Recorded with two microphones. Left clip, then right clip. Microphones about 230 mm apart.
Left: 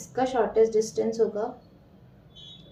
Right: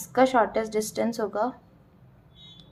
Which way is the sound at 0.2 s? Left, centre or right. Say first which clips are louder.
Right 1 dB; right.